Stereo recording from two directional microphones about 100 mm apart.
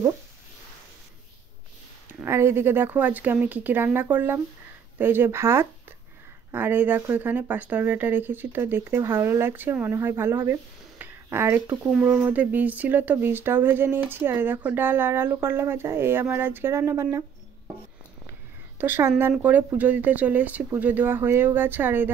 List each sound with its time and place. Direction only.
2.2 s speech: 25° right (ahead or behind)
18.8 s speech: 20° right (ahead or behind)